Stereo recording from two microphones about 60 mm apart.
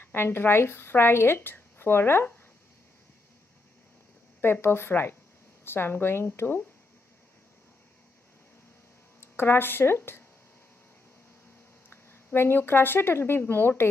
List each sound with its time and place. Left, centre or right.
0.0 s a woman's voice: left
4.4 s a woman's voice: left
9.2 s speech: left
11.9 s speech: left